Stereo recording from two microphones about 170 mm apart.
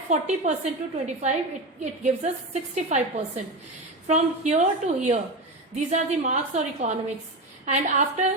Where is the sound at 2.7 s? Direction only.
40° right (ahead or behind).